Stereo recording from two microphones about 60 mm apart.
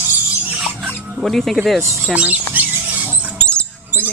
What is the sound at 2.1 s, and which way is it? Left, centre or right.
Speech, right.